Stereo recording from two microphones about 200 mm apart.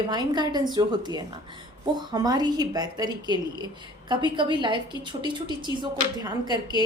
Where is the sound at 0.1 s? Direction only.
20° right (ahead or behind).